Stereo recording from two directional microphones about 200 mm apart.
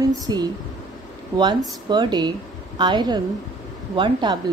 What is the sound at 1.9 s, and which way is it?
Speech, 20° right (ahead or behind).